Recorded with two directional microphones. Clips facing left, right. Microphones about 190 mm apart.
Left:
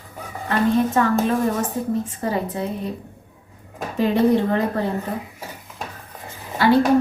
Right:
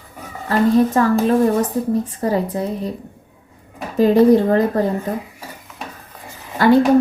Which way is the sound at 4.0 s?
40° right (ahead or behind).